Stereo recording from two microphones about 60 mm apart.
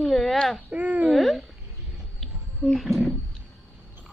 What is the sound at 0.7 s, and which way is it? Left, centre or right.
Speech, right.